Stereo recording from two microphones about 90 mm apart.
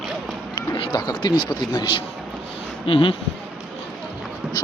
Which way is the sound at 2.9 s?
80° left.